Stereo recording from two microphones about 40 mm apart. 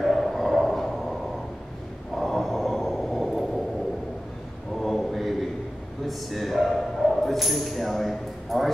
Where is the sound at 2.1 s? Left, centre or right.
Centre.